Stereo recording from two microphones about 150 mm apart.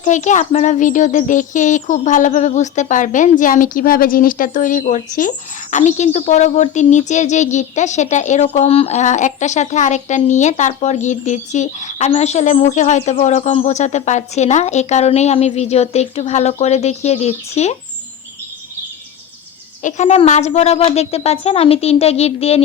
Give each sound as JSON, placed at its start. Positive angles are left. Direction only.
{"t": 0.0, "sound": "a child's voice", "side_deg": 55}
{"t": 8.6, "sound": "a child's voice", "side_deg": 40}
{"t": 19.8, "sound": "a child's voice", "side_deg": 50}